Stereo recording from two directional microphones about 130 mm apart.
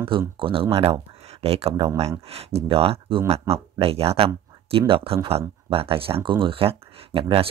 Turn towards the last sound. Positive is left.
turn(degrees=-45)  # may be behind; listen again after turning